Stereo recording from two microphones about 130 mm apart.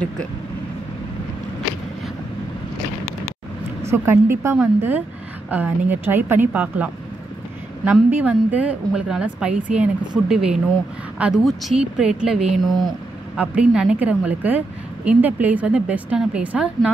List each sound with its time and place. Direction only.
3.8 s a woman's voice: 20° right (ahead or behind)